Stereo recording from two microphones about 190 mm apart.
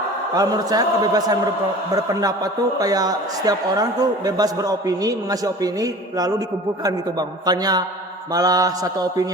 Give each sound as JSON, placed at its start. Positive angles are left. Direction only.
{"t": 0.3, "sound": "a man's voice", "side_deg": -20}